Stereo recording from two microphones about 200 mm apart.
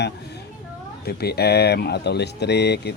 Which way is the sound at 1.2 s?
55° left (ahead or behind).